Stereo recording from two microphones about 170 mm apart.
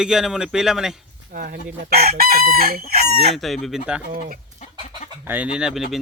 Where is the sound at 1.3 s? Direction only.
55° right (ahead or behind).